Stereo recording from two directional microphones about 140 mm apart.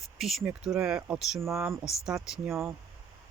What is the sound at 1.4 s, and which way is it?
Speech, 20° right (ahead or behind).